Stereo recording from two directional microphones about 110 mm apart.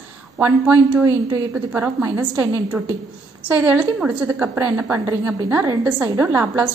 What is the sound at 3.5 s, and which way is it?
A woman's voice, 15° right (ahead or behind).